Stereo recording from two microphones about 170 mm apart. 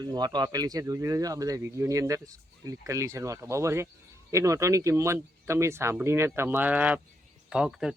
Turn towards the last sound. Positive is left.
turn(degrees=-5)  # may be behind; listen again after turning